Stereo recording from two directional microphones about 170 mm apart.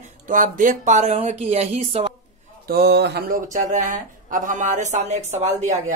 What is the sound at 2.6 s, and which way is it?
Speech, 70° right (ahead or behind).